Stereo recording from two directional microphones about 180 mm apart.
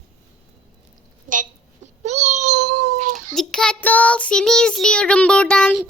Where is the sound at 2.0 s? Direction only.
40° right (ahead or behind).